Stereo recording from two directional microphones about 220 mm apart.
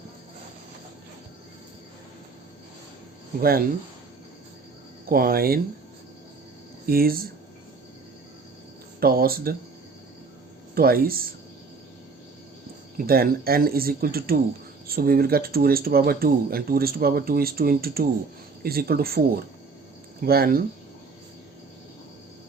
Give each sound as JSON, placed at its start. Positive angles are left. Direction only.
{"t": 5.0, "sound": "speech", "side_deg": -40}
{"t": 6.8, "sound": "speech", "side_deg": -40}
{"t": 9.0, "sound": "speech", "side_deg": -40}
{"t": 10.8, "sound": "speech", "side_deg": -40}
{"t": 13.0, "sound": "speech", "side_deg": -40}
{"t": 20.2, "sound": "speech", "side_deg": -45}